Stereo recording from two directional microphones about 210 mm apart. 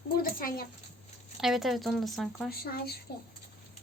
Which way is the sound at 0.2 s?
45° left (ahead or behind).